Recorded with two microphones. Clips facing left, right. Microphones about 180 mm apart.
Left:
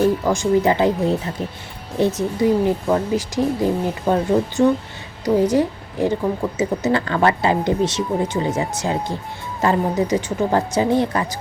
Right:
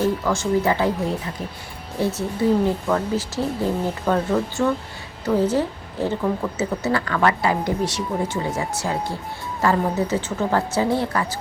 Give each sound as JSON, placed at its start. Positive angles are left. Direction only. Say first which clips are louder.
{"t": 0.3, "sound": "speech", "louder": "left 3 dB", "side_deg": 20}
{"t": 2.0, "sound": "a woman's voice", "louder": "left 4 dB", "side_deg": 20}